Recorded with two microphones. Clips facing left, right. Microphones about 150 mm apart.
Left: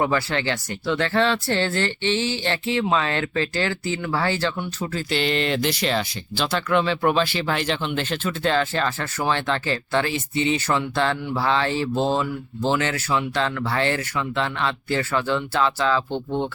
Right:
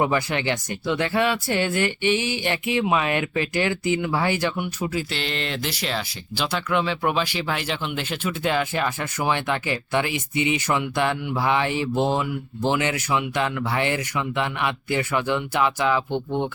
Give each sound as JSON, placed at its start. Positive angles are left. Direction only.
{"t": 0.0, "sound": "speech", "side_deg": -15}
{"t": 5.1, "sound": "speech", "side_deg": 0}